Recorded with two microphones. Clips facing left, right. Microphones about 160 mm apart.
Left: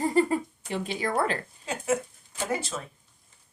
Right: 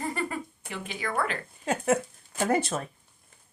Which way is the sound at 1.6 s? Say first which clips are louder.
Right 3 dB; 55° right (ahead or behind).